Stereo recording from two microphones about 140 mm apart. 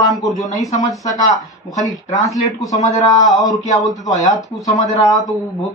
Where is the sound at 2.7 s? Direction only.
25° left (ahead or behind).